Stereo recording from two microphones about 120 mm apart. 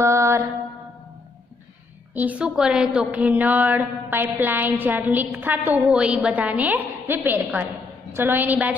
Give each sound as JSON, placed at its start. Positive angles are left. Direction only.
{"t": 0.0, "sound": "mantra", "side_deg": -25}
{"t": 2.1, "sound": "a woman's voice", "side_deg": -10}